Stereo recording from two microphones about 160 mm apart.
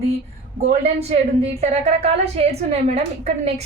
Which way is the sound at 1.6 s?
40° right (ahead or behind).